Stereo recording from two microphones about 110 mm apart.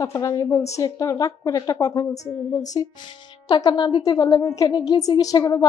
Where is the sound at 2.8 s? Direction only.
40° left (ahead or behind).